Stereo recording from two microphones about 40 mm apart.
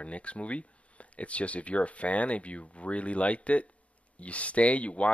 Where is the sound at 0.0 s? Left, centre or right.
Left.